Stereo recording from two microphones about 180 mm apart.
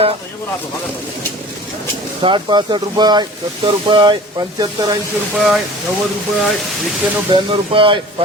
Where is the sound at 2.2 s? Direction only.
25° right (ahead or behind).